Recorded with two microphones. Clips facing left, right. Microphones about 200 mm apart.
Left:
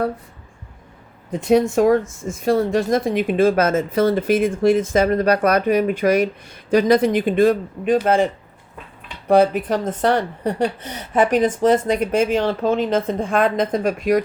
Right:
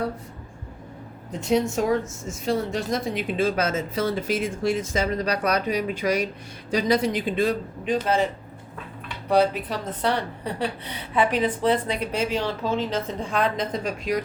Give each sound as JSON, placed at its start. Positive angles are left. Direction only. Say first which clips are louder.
{"t": 1.3, "sound": "a woman's voice", "louder": "left 6 dB", "side_deg": 55}
{"t": 9.3, "sound": "a woman's voice", "louder": "left 6 dB", "side_deg": 50}